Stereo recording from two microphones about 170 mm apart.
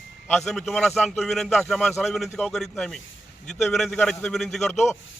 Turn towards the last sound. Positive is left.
turn(degrees=0)  # may be behind; listen again after turning